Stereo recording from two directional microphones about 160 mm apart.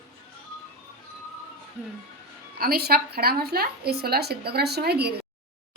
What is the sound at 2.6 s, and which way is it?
A woman's voice, 75° right (ahead or behind).